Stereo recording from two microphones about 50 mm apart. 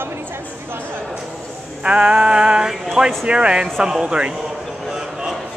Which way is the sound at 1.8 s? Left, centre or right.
Centre.